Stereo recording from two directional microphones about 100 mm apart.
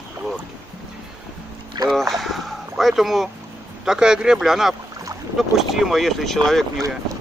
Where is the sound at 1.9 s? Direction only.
Centre (ahead or behind).